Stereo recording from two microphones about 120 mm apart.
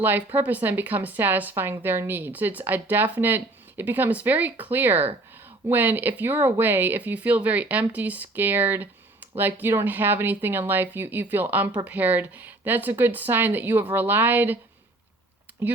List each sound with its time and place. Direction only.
0.3 s a woman's voice: 15° right (ahead or behind)
15.6 s a woman's voice: 15° right (ahead or behind)